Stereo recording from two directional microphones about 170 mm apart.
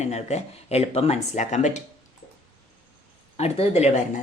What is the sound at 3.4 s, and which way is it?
Speech, 40° left (ahead or behind).